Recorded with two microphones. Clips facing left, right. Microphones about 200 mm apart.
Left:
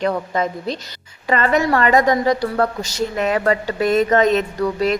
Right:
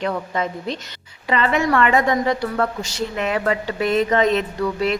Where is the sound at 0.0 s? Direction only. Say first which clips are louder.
Left 3 dB; 40° left (ahead or behind).